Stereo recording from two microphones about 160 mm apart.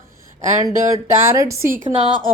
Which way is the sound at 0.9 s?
20° right (ahead or behind).